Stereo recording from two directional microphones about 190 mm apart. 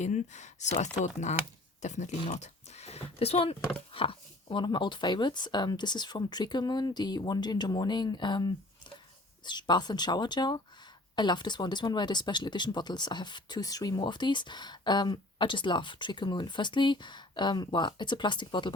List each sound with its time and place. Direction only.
0.0 s speech: 40° left (ahead or behind)
2.3 s a sound: 35° left (ahead or behind)
3.9 s speech: 30° left (ahead or behind)